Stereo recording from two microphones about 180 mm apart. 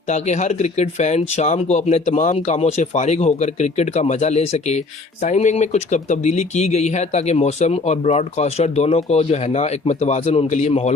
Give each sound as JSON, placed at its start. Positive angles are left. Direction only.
{"t": 0.1, "sound": "speech", "side_deg": 40}